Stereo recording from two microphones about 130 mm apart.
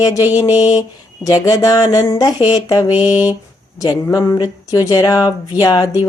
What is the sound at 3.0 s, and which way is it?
Speech, 30° left (ahead or behind).